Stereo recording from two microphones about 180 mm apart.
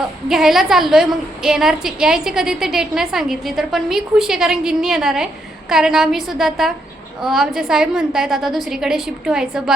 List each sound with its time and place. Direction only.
0.3 s a woman's voice: centre (ahead or behind)